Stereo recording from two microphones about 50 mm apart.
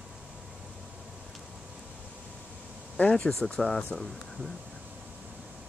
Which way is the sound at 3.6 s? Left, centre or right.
Centre.